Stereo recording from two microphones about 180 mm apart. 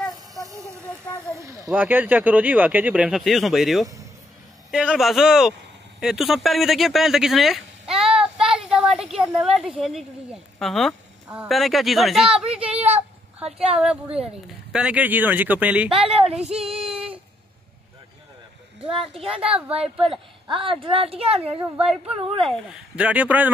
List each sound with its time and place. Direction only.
1.3 s a sound: 15° right (ahead or behind)
1.7 s speech: 10° right (ahead or behind)
8.0 s child singing: 5° right (ahead or behind)
8.5 s a woman's voice: 5° right (ahead or behind)
16.1 s a child's voice: 35° right (ahead or behind)
16.4 s child singing: 35° right (ahead or behind)
18.9 s speech: centre (ahead or behind)
19.2 s a child's voice: 30° right (ahead or behind)
22.4 s speech: centre (ahead or behind)